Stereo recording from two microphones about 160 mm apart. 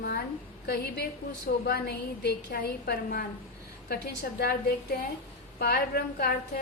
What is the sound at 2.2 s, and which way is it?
A woman's voice, 80° left.